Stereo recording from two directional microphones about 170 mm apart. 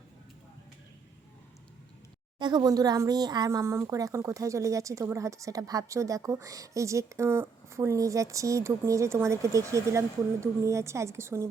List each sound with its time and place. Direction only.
2.4 s a woman's voice: 25° right (ahead or behind)